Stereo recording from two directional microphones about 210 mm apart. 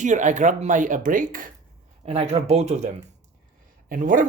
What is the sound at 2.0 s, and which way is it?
Speech, 30° right (ahead or behind).